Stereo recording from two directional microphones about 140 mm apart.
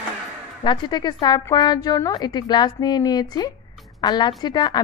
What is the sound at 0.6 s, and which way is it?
A woman's voice, 35° left (ahead or behind).